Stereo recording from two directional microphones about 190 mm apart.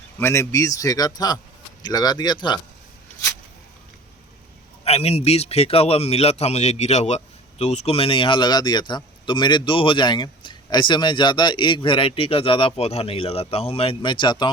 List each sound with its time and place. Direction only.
0.2 s speech: 15° left (ahead or behind)
4.9 s a man's voice: 35° left (ahead or behind)